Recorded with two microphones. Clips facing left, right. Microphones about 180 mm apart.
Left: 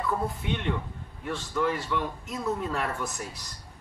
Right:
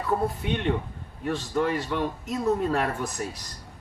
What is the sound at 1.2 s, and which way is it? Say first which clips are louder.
Speech: right 3 dB; 40° right (ahead or behind).